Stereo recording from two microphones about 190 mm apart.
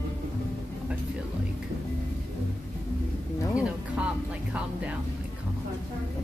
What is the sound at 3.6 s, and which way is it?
Music, 5° right (ahead or behind).